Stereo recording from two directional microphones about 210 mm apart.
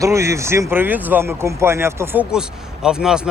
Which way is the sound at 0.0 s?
15° right (ahead or behind).